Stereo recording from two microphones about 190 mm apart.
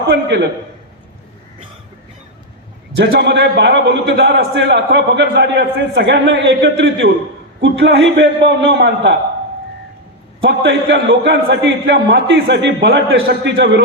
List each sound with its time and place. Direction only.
0.1 s a man's voice: 70° right (ahead or behind)
3.0 s a man's voice: 65° right (ahead or behind)
7.6 s a man's voice: 75° right (ahead or behind)
10.4 s a man's voice: 75° right (ahead or behind)
13.2 s a man's voice: 60° right (ahead or behind)